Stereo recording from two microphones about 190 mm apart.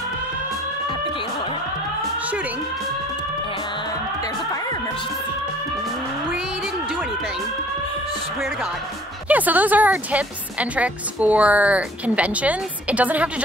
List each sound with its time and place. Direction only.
9.3 s a woman's voice: 10° right (ahead or behind)